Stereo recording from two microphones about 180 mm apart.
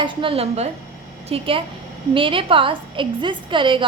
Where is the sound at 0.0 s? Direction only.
30° right (ahead or behind).